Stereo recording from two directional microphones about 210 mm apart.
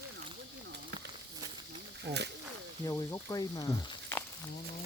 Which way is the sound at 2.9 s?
15° left (ahead or behind).